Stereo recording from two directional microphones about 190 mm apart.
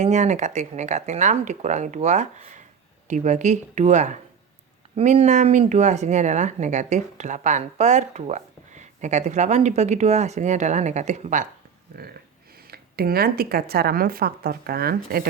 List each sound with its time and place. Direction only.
0.0 s speech: 40° right (ahead or behind)
11.9 s speech: 55° right (ahead or behind)